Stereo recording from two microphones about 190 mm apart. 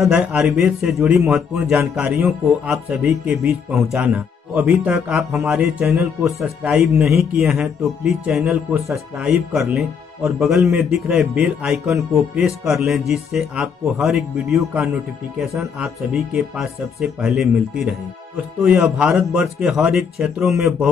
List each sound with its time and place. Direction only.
0.0 s a man's voice: 5° right (ahead or behind)